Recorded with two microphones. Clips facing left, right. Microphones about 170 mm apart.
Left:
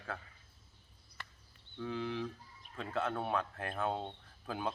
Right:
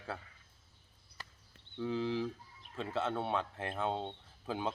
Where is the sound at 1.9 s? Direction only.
30° right (ahead or behind).